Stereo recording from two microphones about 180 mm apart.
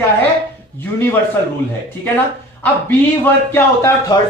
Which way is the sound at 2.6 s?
10° left (ahead or behind).